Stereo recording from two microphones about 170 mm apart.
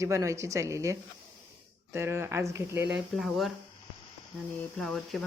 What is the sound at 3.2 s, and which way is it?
Speech, centre (ahead or behind).